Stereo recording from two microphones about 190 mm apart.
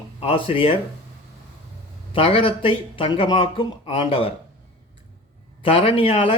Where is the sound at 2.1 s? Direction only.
30° left (ahead or behind).